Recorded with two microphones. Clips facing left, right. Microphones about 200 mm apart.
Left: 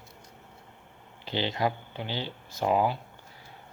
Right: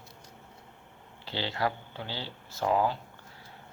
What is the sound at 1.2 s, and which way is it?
Speech, 20° left (ahead or behind).